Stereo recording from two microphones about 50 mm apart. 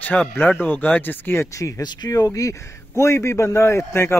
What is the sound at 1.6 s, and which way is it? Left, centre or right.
Speech, left.